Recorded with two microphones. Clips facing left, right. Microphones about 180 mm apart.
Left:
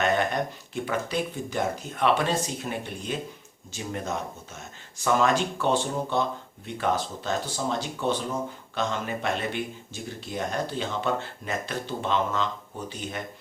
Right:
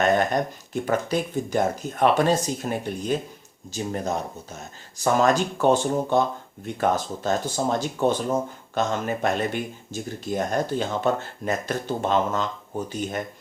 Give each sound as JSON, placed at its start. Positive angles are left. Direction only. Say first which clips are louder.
{"t": 0.0, "sound": "speech", "louder": "right 4 dB", "side_deg": -45}